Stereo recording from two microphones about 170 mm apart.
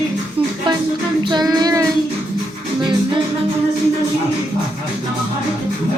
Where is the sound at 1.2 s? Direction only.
25° right (ahead or behind).